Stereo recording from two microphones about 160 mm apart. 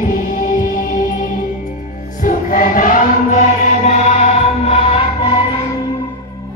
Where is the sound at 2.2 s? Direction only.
60° left (ahead or behind); by 5.4 s 35° left (ahead or behind).